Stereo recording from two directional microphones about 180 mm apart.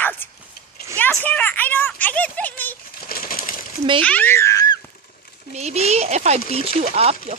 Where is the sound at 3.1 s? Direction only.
55° left (ahead or behind).